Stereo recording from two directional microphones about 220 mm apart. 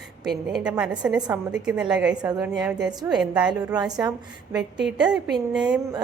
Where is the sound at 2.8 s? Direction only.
5° right (ahead or behind).